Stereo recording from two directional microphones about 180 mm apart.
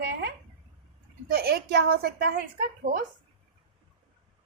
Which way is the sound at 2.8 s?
45° right (ahead or behind).